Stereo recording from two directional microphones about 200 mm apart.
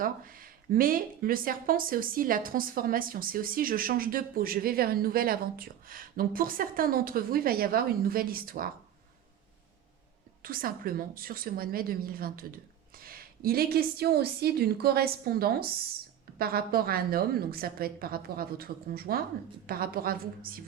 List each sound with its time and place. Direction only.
0.0 s speech: 45° right (ahead or behind)
10.4 s speech: 45° right (ahead or behind)